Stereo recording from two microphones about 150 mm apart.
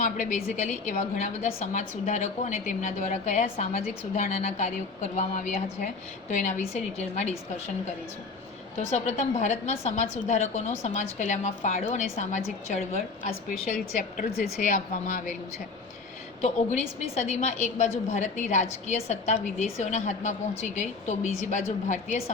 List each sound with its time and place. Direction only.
0.0 s a woman's voice: 60° left (ahead or behind)
3.4 s a woman's voice: 45° left (ahead or behind)
8.9 s a woman's voice: 50° left (ahead or behind)
16.4 s a woman's voice: 50° left (ahead or behind)